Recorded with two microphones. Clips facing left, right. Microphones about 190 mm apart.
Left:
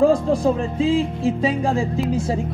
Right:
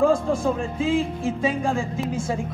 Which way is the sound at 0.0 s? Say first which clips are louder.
Left 4 dB; 35° left (ahead or behind).